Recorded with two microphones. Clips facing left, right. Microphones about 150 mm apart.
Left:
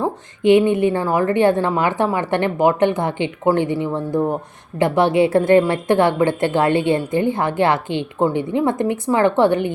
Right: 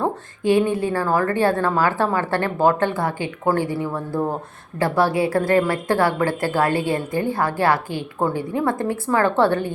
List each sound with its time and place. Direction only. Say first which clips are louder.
0.0 s a woman's voice: left 4 dB; 20° left (ahead or behind)